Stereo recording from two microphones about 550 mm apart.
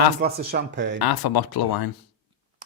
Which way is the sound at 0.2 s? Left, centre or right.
Centre.